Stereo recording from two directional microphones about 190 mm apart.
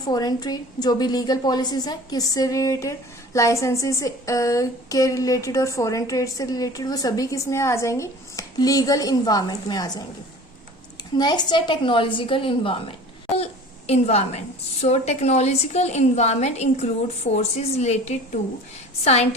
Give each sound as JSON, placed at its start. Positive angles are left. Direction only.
{"t": 0.1, "sound": "a woman's voice", "side_deg": 20}
{"t": 11.2, "sound": "a woman's voice", "side_deg": 20}